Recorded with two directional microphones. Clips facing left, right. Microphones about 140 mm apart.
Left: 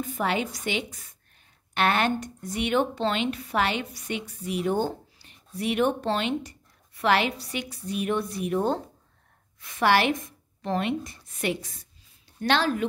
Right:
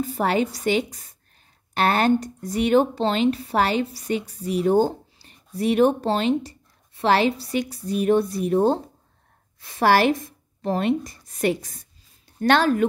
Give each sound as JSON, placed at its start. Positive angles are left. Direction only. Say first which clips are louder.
{"t": 0.0, "sound": "a woman's voice", "louder": "right 5 dB", "side_deg": -35}